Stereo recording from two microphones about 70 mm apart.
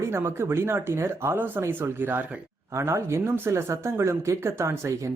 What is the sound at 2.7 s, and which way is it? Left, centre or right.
Speech, right.